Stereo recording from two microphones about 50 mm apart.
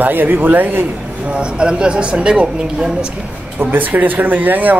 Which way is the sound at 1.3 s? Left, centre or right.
Right.